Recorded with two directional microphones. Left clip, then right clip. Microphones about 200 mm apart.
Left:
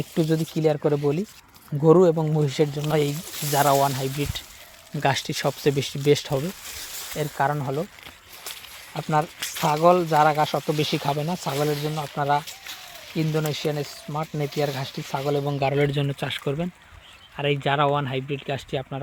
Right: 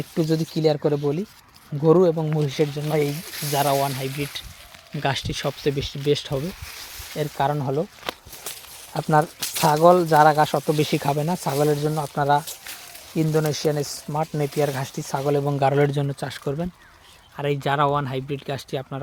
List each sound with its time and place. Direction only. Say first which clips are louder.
0.2 s speech: right 1 dB; 10° right (ahead or behind); by 6.3 s 15° left (ahead or behind)
7.2 s speech: right 1 dB; 15° right (ahead or behind)
8.4 s speech: even; 30° right (ahead or behind)
13.8 s speech: right 4 dB; centre (ahead or behind)
14.2 s speech: right 3 dB; 10° right (ahead or behind)